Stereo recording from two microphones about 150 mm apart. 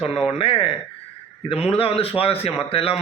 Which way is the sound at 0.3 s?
40° left (ahead or behind).